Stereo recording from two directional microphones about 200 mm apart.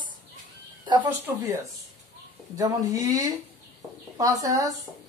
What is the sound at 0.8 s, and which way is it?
Speech, 25° right (ahead or behind).